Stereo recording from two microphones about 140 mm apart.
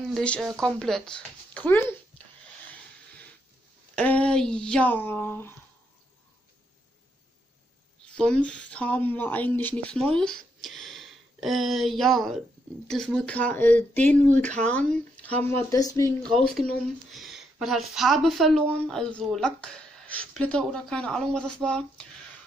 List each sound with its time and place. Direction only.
0.1 s speech: 5° left (ahead or behind)
3.9 s speech: 10° left (ahead or behind)
8.2 s speech: 5° left (ahead or behind)
15.7 s speech: 25° left (ahead or behind)
16.3 s a woman's voice: centre (ahead or behind)